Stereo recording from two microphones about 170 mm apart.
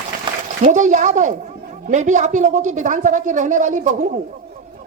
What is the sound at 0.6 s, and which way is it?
A woman's voice, 45° right (ahead or behind).